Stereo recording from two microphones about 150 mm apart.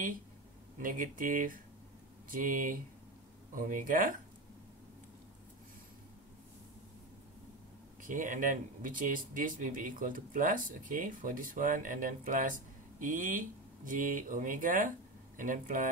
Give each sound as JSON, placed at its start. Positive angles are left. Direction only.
{"t": 0.7, "sound": "speech", "side_deg": -65}
{"t": 8.0, "sound": "speech", "side_deg": -60}